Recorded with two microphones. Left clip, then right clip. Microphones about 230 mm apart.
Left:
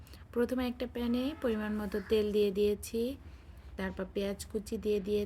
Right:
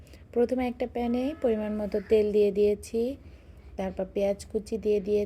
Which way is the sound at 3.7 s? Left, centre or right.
Centre.